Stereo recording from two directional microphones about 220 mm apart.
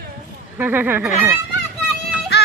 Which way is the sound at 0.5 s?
10° right (ahead or behind).